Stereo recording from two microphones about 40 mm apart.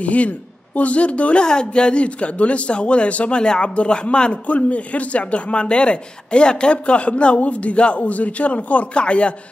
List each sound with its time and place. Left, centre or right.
0.0 s a woman's voice: left
1.4 s speech: centre
4.5 s speech: left